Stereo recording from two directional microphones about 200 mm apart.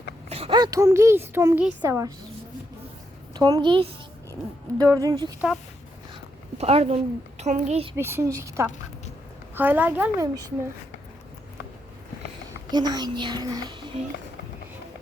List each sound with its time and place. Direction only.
0.3 s a woman's voice: 30° right (ahead or behind)
3.3 s a child's voice: 20° right (ahead or behind)
6.6 s a woman's voice: 30° right (ahead or behind)
7.9 s a woman's voice: 10° right (ahead or behind)
12.7 s a child's voice: 20° right (ahead or behind)